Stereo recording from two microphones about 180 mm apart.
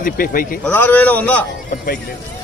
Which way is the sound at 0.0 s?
50° left (ahead or behind).